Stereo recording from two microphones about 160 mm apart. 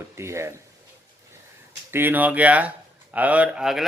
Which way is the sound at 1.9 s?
15° right (ahead or behind).